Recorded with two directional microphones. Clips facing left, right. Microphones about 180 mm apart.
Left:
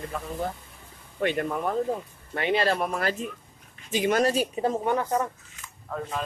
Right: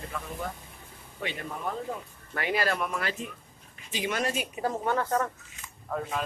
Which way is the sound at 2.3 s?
25° left (ahead or behind).